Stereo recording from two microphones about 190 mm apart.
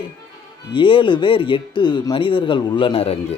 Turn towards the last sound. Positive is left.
turn(degrees=30)  # may be behind; listen again after turning